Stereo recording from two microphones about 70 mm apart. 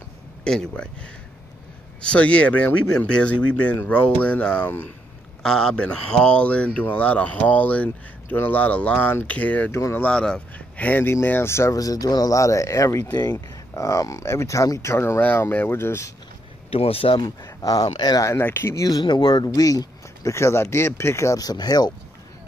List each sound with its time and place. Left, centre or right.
0.4 s speech: centre
2.0 s speech: centre
5.4 s speech: centre
9.7 s speech: left
10.0 s speech: centre
10.8 s speech: left
11.7 s speech: left
13.1 s speech: left
17.1 s speech: left
18.4 s speech: left
18.9 s speech: left
20.3 s speech: left
21.4 s speech: left